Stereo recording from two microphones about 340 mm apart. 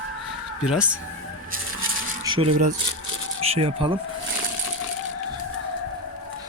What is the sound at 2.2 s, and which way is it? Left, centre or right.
Speech, centre.